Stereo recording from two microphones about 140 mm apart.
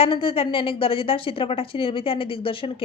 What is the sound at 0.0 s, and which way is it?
A woman's voice, 40° left (ahead or behind).